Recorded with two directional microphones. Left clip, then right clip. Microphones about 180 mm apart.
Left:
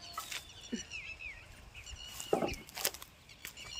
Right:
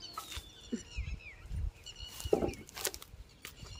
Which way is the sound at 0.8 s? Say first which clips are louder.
Left 6 dB; 70° right (ahead or behind).